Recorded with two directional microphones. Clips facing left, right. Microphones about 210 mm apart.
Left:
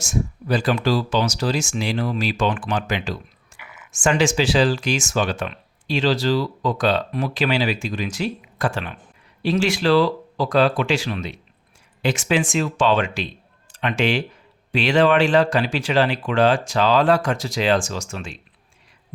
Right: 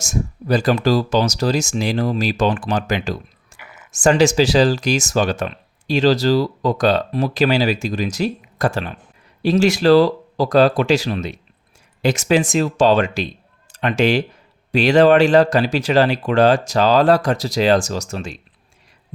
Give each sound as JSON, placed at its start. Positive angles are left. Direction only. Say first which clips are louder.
{"t": 0.0, "sound": "speech", "louder": "right 1 dB", "side_deg": -40}